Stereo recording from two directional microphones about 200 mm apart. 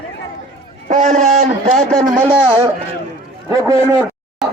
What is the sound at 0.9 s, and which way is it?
A man's voice, 35° right (ahead or behind).